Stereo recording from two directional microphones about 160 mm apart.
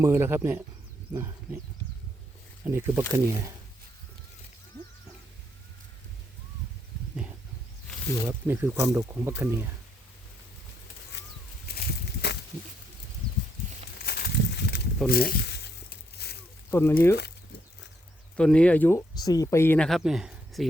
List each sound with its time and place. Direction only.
0.0 s speech: 15° right (ahead or behind)
2.6 s speech: 15° right (ahead or behind)
8.3 s speech: 15° right (ahead or behind)
11.7 s a sound: 85° left
14.0 s a sound: 85° left
15.1 s speech: 70° left (ahead or behind); by 15.7 s 90° left
16.1 s snake: 90° left
16.7 s speech: 15° left (ahead or behind)
18.3 s speech: 5° left (ahead or behind)
19.1 s speech: 25° left (ahead or behind); by 20.7 s centre (ahead or behind)